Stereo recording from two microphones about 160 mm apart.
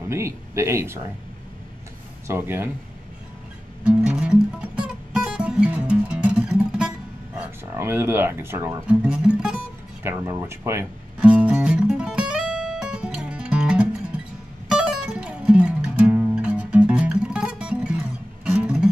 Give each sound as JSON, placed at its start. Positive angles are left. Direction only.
{"t": 0.1, "sound": "speech", "side_deg": -15}
{"t": 2.2, "sound": "speech", "side_deg": -15}
{"t": 4.0, "sound": "music", "side_deg": -5}
{"t": 7.7, "sound": "speech", "side_deg": -15}
{"t": 10.0, "sound": "music", "side_deg": -15}